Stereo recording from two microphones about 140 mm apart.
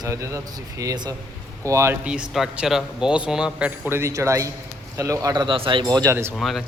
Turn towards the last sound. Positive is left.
turn(degrees=0)  # may be behind; listen again after turning